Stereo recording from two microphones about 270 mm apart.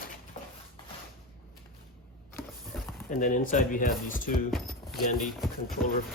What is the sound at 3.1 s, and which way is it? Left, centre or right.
Speech, left.